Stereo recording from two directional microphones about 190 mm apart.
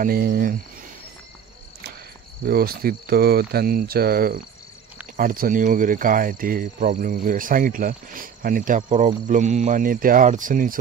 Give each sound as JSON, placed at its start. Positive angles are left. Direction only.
{"t": 0.0, "sound": "speech", "side_deg": -50}
{"t": 2.4, "sound": "speech", "side_deg": -50}